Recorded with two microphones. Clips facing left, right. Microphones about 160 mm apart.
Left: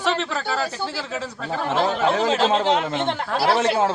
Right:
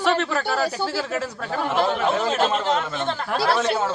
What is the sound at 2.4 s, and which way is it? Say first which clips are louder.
Speech: left 2 dB; 90° left.